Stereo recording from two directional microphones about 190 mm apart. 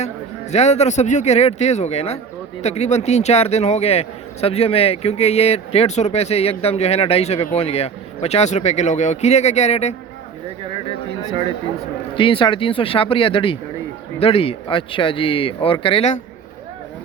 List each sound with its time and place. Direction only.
0.5 s a man's voice: 35° left (ahead or behind)
11.3 s speech: 25° right (ahead or behind)
12.1 s speech: 25° left (ahead or behind)